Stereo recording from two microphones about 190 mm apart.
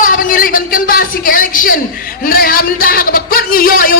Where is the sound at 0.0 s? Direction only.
45° left (ahead or behind).